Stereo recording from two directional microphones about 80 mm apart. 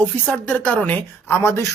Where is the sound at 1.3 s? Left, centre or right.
Left.